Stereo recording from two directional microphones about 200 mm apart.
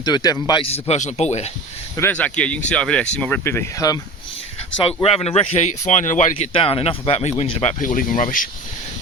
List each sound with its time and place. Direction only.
0.0 s speech: 20° left (ahead or behind)
2.0 s speech: 10° left (ahead or behind)
5.0 s speech: 30° left (ahead or behind)